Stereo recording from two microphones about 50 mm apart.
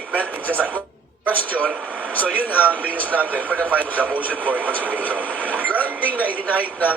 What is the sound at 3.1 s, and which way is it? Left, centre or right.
Speech, right.